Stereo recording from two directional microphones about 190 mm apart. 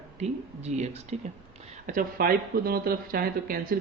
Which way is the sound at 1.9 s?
50° right (ahead or behind).